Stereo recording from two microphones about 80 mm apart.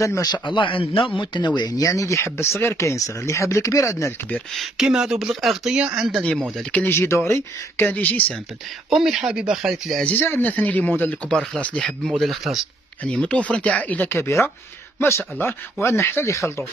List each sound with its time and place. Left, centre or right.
0.0 s speech: left
0.3 s a man's voice: left
1.8 s speech: left
4.6 s speech: centre
6.9 s speech: left
8.9 s speech: centre
10.0 s speech: left; by 12.5 s centre
13.0 s speech: centre; by 16.6 s left